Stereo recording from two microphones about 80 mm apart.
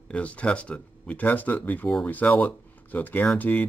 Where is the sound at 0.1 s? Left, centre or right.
Centre.